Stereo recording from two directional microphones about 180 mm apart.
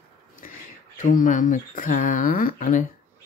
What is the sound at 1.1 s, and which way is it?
Mantra, 45° left (ahead or behind).